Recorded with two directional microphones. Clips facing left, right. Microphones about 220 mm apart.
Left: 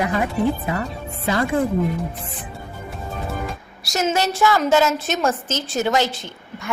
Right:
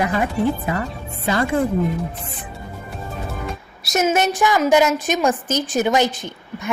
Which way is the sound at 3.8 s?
20° right (ahead or behind).